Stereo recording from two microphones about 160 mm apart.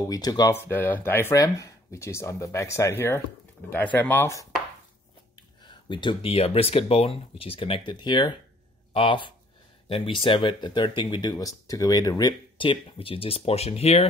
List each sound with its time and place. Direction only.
0.1 s speech: 25° left (ahead or behind)
5.7 s speech: 30° left (ahead or behind)